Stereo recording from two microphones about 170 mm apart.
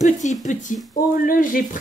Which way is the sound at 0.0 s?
45° left (ahead or behind).